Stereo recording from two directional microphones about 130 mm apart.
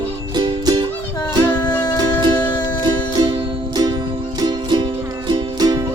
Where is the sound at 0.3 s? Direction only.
35° right (ahead or behind).